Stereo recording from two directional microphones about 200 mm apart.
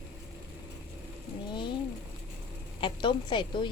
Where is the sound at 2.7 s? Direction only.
25° left (ahead or behind).